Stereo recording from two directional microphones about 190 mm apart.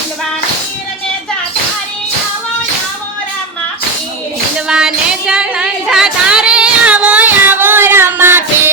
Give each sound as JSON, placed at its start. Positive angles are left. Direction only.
{"t": 4.7, "sound": "music", "side_deg": -5}